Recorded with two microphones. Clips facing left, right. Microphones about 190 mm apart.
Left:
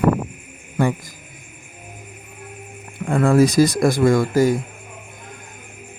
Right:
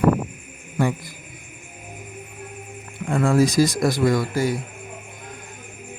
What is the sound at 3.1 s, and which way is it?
Speech, 55° left (ahead or behind).